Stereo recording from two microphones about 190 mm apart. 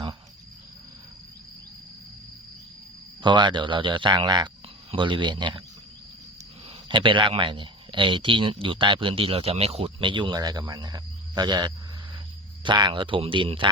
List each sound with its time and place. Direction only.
3.2 s speech: 25° right (ahead or behind)
6.8 s speech: 25° right (ahead or behind)